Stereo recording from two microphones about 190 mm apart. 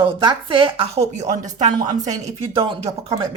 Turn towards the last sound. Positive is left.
turn(degrees=-25)  # may be behind; listen again after turning